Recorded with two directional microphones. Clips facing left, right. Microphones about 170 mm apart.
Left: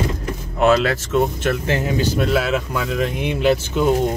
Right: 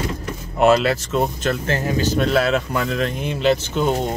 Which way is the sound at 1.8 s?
20° left (ahead or behind).